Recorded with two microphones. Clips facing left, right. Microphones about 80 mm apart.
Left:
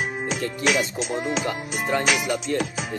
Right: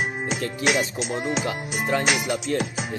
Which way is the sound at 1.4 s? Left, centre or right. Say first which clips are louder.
Even; centre.